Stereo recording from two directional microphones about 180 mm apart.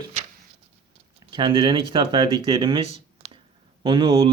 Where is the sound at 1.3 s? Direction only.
25° right (ahead or behind).